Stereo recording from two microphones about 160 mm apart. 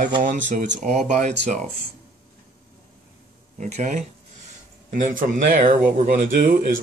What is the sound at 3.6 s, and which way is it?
Speech, 50° right (ahead or behind).